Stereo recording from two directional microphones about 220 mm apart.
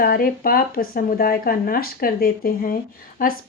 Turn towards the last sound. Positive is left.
turn(degrees=40)  # may be behind; listen again after turning